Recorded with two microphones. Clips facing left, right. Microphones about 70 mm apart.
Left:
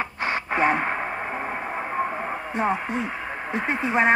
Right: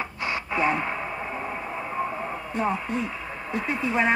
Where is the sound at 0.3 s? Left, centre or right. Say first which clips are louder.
Left 3 dB; left.